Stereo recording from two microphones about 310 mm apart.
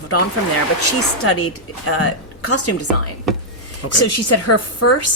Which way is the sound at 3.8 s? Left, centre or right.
Left.